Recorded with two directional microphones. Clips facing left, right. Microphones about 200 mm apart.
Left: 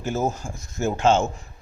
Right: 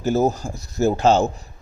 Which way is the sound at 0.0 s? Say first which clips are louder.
Right 6 dB; 35° right (ahead or behind).